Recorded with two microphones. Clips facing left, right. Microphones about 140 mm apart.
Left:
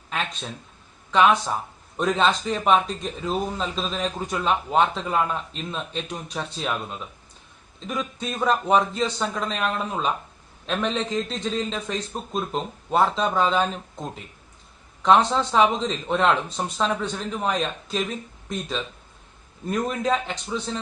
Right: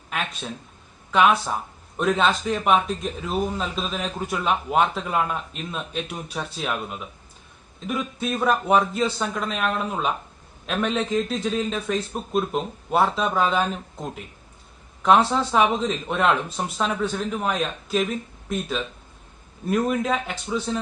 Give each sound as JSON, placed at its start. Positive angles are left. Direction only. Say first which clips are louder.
{"t": 1.1, "sound": "speech", "louder": "even", "side_deg": -5}
{"t": 7.9, "sound": "speech", "louder": "right 3 dB", "side_deg": -5}
{"t": 15.0, "sound": "speech", "louder": "even", "side_deg": -5}
{"t": 19.7, "sound": "speech", "louder": "right 2 dB", "side_deg": -5}